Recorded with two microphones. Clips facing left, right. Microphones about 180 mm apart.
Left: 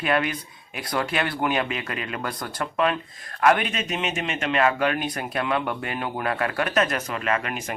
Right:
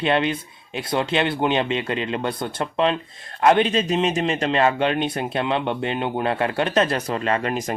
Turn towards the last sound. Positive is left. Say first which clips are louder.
# right 4 dB
turn(degrees=-35)  # may be behind; listen again after turning